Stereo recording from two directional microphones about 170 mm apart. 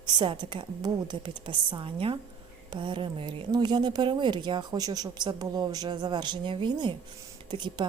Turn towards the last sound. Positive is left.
turn(degrees=-25)  # may be behind; listen again after turning